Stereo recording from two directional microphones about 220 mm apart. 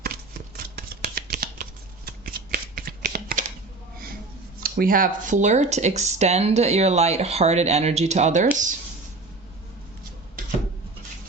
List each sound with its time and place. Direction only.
0.0 s shuffling cards: 40° right (ahead or behind)
4.6 s speech: 40° right (ahead or behind)
10.4 s a sound: 40° right (ahead or behind)